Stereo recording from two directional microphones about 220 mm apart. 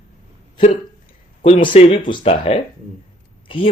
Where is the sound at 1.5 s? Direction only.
35° left (ahead or behind).